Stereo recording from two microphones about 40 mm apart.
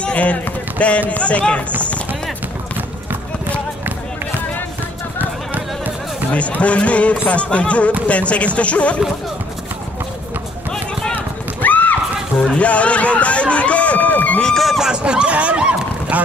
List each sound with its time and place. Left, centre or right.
0.0 s run: left
0.7 s speech: left
5.2 s run: right
6.6 s speech: left
11.6 s horse: left
12.5 s speech: left
14.8 s goose: right